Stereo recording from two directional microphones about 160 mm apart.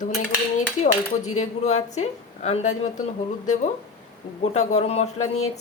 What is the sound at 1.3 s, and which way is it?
A woman's voice, 45° left (ahead or behind).